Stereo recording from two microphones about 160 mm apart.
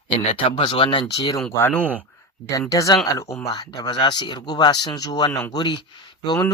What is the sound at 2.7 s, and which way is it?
Speech, 20° left (ahead or behind).